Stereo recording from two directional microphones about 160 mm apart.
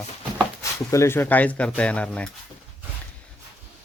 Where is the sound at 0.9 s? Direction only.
15° left (ahead or behind).